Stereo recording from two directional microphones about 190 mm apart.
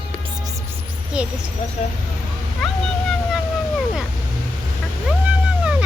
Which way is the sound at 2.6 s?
Centre (ahead or behind).